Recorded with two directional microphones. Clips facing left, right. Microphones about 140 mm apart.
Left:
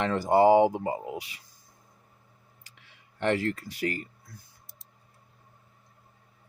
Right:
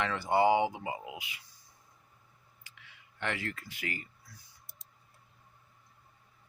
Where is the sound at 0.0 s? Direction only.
40° left (ahead or behind).